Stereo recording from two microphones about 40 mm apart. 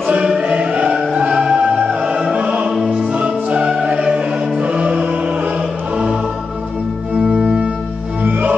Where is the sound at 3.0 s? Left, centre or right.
Right.